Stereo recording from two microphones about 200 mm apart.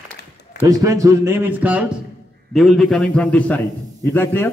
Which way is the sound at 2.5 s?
Centre (ahead or behind).